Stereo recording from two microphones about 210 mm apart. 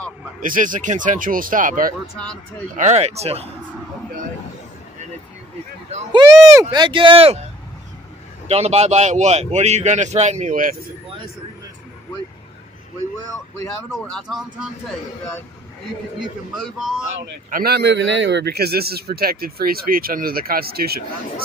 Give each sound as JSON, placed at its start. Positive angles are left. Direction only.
{"t": 0.4, "sound": "speech", "side_deg": -40}
{"t": 6.1, "sound": "speech", "side_deg": -20}
{"t": 8.5, "sound": "speech", "side_deg": -30}
{"t": 13.9, "sound": "speech", "side_deg": 0}
{"t": 16.5, "sound": "speech", "side_deg": 0}
{"t": 17.5, "sound": "a man's voice", "side_deg": -45}